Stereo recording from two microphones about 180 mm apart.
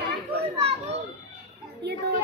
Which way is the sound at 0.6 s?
35° right (ahead or behind).